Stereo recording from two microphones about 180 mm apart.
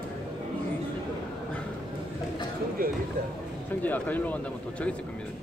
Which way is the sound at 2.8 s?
55° right (ahead or behind).